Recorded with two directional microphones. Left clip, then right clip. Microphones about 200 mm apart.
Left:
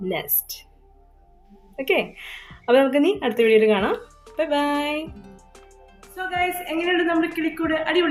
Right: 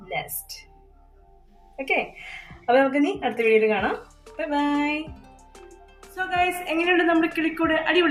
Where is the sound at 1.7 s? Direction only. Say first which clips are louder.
Left 3 dB; 55° left (ahead or behind).